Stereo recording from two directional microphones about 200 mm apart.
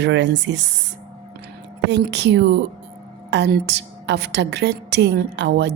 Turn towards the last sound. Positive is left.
turn(degrees=-60)  # may be behind; listen again after turning